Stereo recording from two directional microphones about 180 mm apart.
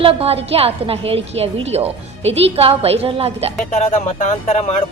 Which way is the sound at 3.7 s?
35° left (ahead or behind).